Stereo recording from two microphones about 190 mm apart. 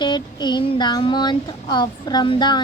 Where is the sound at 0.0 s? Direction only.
25° left (ahead or behind).